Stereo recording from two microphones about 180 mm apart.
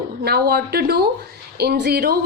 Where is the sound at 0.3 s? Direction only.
60° right (ahead or behind).